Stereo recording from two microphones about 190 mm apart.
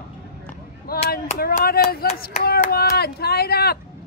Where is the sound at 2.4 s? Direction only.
55° left (ahead or behind).